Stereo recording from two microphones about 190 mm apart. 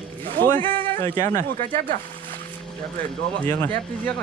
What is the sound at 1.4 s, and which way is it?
Speech, 45° right (ahead or behind).